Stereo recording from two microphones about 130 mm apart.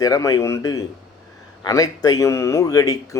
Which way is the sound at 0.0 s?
25° left (ahead or behind).